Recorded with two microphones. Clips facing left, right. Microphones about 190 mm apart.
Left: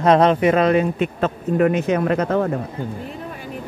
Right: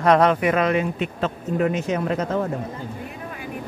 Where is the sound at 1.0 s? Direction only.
55° left (ahead or behind).